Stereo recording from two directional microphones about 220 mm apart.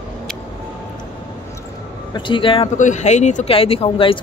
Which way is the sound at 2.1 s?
20° left (ahead or behind).